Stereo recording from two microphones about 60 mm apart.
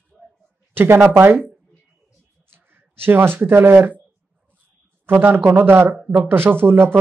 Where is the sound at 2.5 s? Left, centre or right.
Right.